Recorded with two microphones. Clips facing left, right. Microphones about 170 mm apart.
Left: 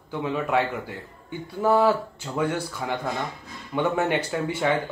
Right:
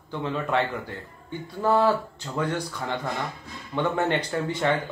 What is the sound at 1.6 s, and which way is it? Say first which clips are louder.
A man's voice: left 1 dB; 10° left (ahead or behind).